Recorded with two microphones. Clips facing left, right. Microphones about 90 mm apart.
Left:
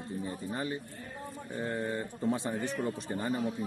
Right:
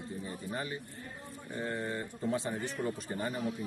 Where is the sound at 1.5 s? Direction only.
15° left (ahead or behind).